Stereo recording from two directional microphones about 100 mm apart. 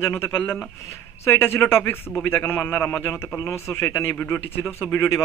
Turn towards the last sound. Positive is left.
turn(degrees=25)  # may be behind; listen again after turning